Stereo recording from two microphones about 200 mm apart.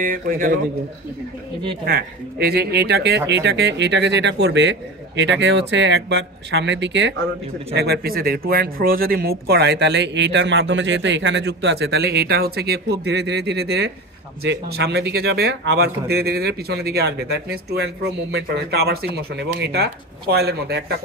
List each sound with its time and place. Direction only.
0.0 s a man's voice: 45° right (ahead or behind)
1.9 s speech: 50° right (ahead or behind)